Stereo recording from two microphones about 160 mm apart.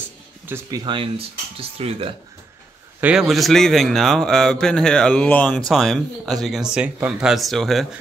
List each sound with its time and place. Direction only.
0.5 s speech: 25° right (ahead or behind)
3.0 s a man's voice: 5° right (ahead or behind)